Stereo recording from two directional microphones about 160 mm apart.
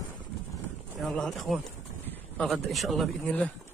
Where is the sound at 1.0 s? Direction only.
5° left (ahead or behind).